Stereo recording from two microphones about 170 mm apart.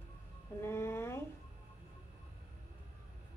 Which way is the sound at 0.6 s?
15° left (ahead or behind).